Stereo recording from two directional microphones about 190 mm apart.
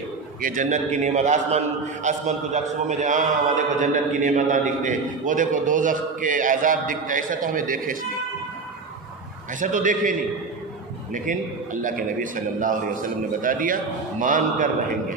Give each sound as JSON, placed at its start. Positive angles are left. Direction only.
{"t": 0.4, "sound": "a man's voice", "side_deg": -45}
{"t": 9.6, "sound": "a man's voice", "side_deg": -45}
{"t": 11.1, "sound": "a man's voice", "side_deg": -45}